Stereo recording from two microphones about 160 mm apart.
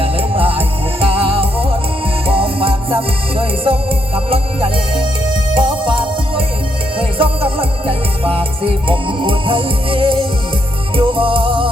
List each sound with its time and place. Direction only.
0.0 s music: 35° right (ahead or behind)